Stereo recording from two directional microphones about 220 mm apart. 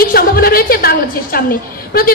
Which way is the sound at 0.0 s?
45° left (ahead or behind).